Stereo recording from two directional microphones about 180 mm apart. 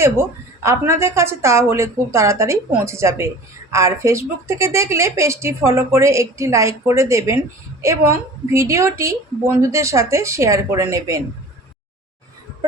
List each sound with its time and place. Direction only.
0.0 s speech: 15° right (ahead or behind)